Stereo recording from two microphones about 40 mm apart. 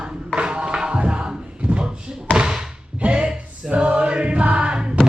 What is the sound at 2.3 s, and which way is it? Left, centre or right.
Slam, centre.